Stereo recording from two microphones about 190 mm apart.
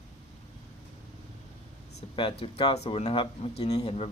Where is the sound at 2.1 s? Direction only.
25° left (ahead or behind).